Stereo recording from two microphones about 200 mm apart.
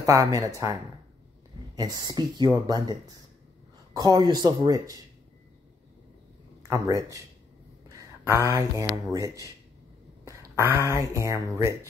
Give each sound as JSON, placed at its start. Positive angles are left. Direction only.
{"t": 0.0, "sound": "speech", "side_deg": -15}
{"t": 1.8, "sound": "speech", "side_deg": -20}
{"t": 6.6, "sound": "speech", "side_deg": -15}